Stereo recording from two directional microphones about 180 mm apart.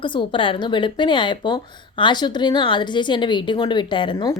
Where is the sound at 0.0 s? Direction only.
25° left (ahead or behind).